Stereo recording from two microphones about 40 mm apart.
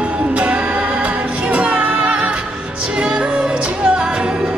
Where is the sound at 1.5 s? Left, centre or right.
Right.